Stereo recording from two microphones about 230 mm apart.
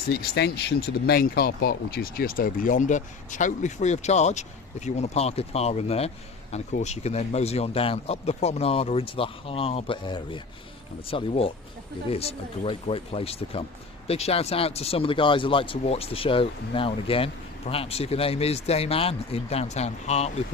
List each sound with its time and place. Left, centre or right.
0.1 s speech: left